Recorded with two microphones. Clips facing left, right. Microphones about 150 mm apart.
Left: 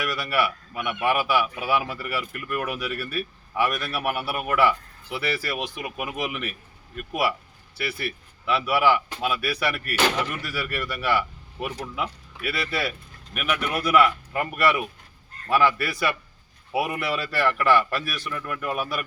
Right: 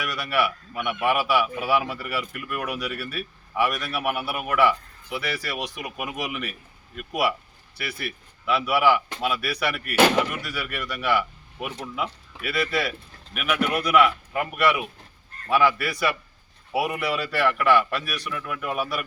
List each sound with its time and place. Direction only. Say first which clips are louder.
0.0 s speech: even; centre (ahead or behind)